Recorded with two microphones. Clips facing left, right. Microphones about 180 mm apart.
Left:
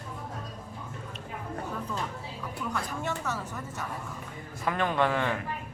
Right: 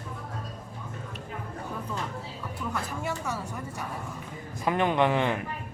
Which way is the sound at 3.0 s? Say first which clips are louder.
Right 1 dB; 10° right (ahead or behind).